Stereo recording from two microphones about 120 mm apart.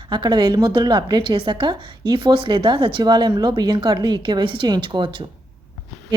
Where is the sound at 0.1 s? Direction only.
40° right (ahead or behind).